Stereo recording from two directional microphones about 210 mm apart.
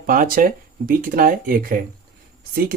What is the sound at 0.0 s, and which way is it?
Speech, 40° right (ahead or behind).